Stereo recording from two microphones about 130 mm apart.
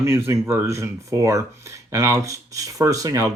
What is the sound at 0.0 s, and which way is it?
Speech, 20° right (ahead or behind).